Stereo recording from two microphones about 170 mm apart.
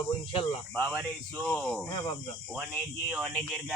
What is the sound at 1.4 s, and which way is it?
Speech, 10° left (ahead or behind).